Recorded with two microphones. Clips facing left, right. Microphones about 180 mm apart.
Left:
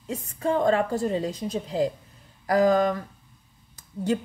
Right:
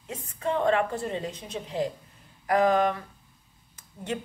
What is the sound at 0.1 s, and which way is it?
Speech, 35° left (ahead or behind).